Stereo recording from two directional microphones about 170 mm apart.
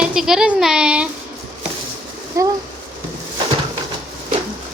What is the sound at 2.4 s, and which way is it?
Speech, 20° right (ahead or behind).